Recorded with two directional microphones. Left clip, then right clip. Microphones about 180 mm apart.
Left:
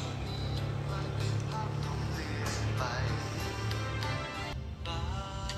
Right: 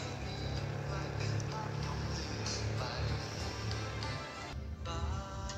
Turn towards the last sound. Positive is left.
turn(degrees=20)  # may be behind; listen again after turning